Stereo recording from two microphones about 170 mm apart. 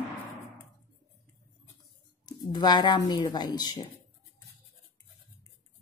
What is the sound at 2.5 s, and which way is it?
Speech, 25° left (ahead or behind).